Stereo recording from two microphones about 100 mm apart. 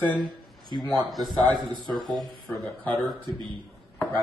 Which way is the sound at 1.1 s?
Centre (ahead or behind).